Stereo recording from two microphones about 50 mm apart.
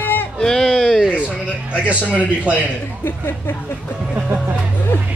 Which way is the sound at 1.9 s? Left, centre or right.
Right.